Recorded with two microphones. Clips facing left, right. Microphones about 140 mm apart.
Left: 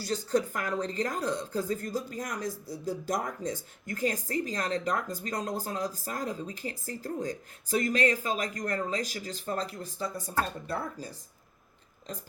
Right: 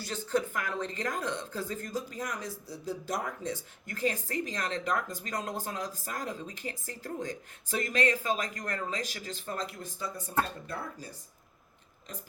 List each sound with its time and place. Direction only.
0.0 s a woman's voice: 40° left (ahead or behind)